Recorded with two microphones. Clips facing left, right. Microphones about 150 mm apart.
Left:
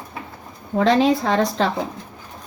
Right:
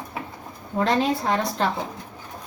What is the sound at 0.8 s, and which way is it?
Speech, 90° left.